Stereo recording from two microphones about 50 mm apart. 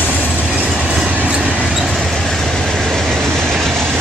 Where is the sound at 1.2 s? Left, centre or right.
Right.